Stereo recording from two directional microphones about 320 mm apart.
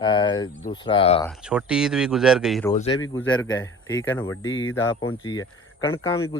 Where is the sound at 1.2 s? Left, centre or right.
Centre.